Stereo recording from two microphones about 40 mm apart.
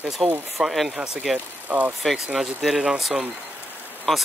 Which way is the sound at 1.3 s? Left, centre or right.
Right.